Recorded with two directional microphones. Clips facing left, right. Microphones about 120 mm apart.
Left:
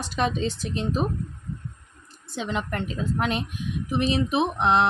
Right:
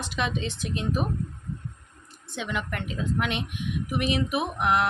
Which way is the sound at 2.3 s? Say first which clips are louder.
Left 3 dB; 35° left (ahead or behind).